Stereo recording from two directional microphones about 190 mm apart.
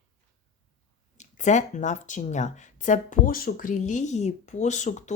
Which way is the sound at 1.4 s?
40° left (ahead or behind).